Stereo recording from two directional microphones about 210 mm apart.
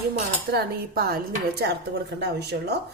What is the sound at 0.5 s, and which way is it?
A woman's voice, 45° right (ahead or behind).